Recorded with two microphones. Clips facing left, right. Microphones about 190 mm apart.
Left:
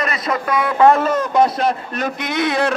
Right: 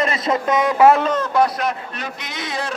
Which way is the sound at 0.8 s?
Centre (ahead or behind).